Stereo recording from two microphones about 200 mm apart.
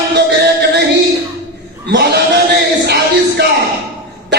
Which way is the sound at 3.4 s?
55° right (ahead or behind).